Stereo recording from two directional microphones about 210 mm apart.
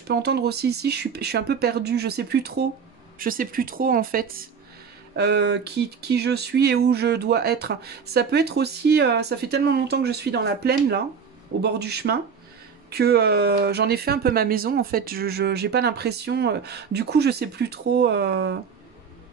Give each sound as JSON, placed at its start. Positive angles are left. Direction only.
{"t": 0.1, "sound": "speech", "side_deg": -50}